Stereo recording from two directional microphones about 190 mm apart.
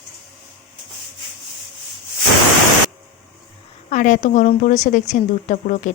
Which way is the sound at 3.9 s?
40° left (ahead or behind).